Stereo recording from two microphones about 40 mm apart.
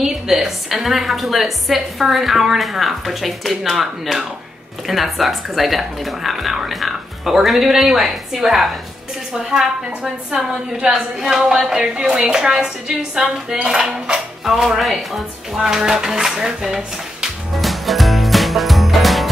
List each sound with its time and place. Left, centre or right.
0.0 s a woman's voice: centre
17.6 s music: centre